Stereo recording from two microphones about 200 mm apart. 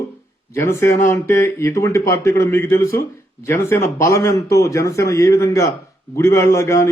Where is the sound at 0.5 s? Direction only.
15° left (ahead or behind).